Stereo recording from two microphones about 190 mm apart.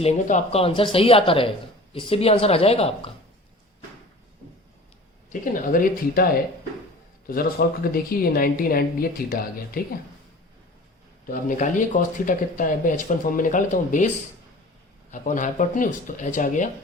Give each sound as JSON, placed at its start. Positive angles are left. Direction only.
{"t": 0.0, "sound": "speech", "side_deg": 35}
{"t": 5.3, "sound": "speech", "side_deg": 45}
{"t": 7.3, "sound": "speech", "side_deg": 50}
{"t": 11.4, "sound": "speech", "side_deg": 40}
{"t": 15.1, "sound": "speech", "side_deg": 40}